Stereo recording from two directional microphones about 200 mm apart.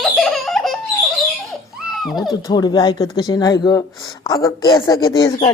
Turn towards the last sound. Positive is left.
turn(degrees=20)  # may be behind; listen again after turning